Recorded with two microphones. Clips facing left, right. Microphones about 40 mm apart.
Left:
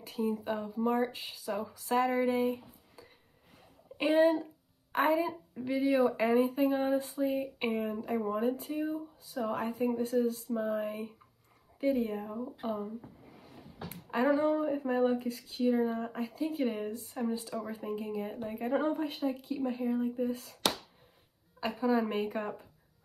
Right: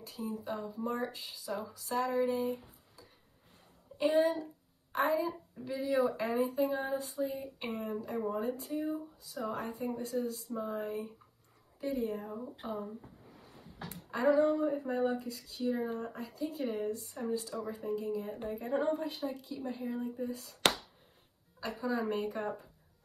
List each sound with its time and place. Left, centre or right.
0.0 s a woman's voice: left
4.0 s a woman's voice: left
14.1 s a woman's voice: left
18.5 s a woman's voice: left
21.5 s a woman's voice: left